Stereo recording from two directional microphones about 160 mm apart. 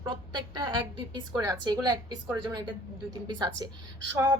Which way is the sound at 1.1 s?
25° right (ahead or behind).